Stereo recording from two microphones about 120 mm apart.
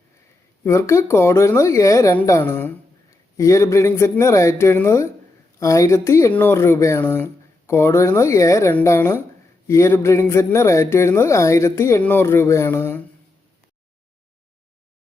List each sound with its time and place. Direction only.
0.6 s speech: 25° left (ahead or behind)